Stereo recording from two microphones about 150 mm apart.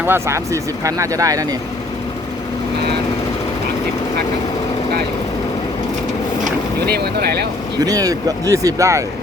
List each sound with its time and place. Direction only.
0.0 s speech: 15° right (ahead or behind)
6.8 s speech: 90° right
7.8 s speech: 25° right (ahead or behind)